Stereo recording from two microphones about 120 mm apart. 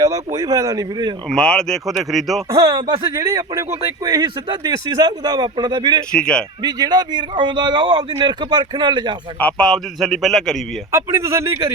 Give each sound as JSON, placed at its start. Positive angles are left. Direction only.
{"t": 0.0, "sound": "speech", "side_deg": -30}
{"t": 1.3, "sound": "a man's voice", "side_deg": 5}
{"t": 2.5, "sound": "speech", "side_deg": -30}
{"t": 6.1, "sound": "speech", "side_deg": 5}
{"t": 6.6, "sound": "speech", "side_deg": -35}
{"t": 9.4, "sound": "a man's voice", "side_deg": 10}
{"t": 10.9, "sound": "speech", "side_deg": -20}